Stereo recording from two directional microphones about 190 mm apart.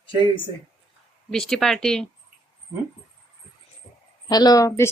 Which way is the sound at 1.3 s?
Centre (ahead or behind).